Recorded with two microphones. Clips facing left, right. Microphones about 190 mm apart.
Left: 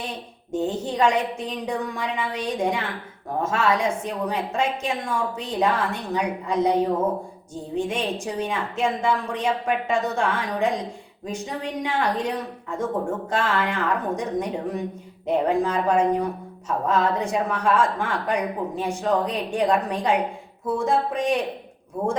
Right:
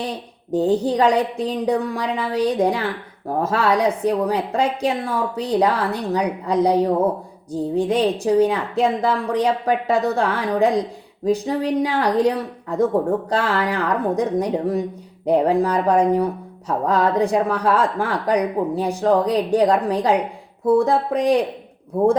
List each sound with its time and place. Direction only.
0.0 s a woman's voice: 35° right (ahead or behind)